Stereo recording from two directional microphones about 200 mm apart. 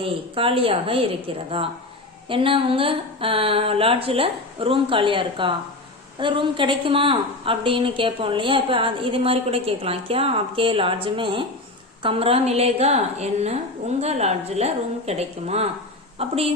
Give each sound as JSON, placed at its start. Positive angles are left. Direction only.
{"t": 0.0, "sound": "a woman's voice", "side_deg": -25}